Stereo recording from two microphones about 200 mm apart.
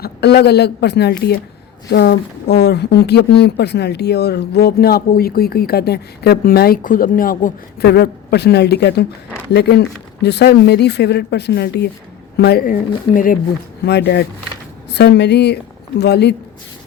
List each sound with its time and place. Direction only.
0.0 s speech: 55° left (ahead or behind)
13.8 s speech: 55° left (ahead or behind)